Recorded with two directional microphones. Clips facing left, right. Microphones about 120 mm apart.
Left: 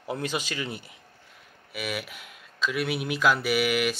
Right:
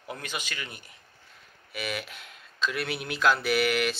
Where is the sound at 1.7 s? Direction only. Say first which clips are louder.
Left 1 dB; 5° left (ahead or behind).